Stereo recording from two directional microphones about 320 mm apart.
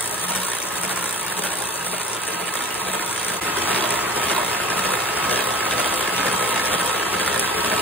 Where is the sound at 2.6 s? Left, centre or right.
Centre.